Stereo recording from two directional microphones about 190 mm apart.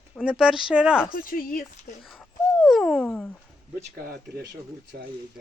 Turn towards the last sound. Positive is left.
turn(degrees=-50)  # may be behind; listen again after turning